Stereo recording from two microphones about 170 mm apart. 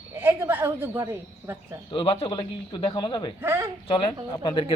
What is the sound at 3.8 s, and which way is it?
Speech, 30° left (ahead or behind).